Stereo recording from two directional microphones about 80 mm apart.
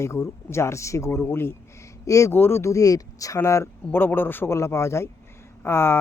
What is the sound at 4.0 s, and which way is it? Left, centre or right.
Speech, left.